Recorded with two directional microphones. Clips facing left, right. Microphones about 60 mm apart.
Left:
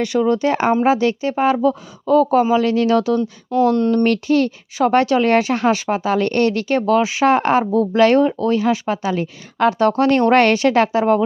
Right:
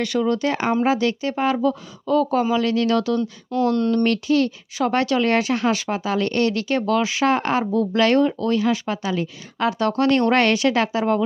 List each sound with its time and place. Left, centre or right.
0.0 s speech: left